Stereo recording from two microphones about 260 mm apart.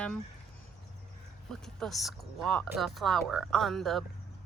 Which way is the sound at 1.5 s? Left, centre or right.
Centre.